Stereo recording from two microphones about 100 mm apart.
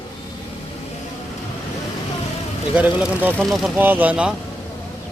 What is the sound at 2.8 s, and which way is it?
Speech, 15° right (ahead or behind).